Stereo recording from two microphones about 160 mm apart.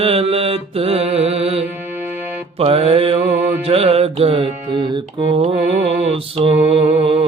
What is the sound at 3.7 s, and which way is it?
Music, 40° right (ahead or behind).